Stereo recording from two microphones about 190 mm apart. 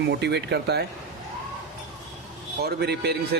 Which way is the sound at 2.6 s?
60° right (ahead or behind).